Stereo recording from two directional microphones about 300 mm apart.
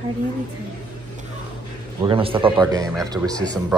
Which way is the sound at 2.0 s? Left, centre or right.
Centre.